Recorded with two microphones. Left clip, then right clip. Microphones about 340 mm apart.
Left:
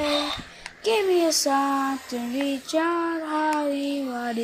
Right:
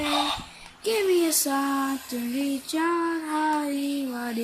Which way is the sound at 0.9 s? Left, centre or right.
Centre.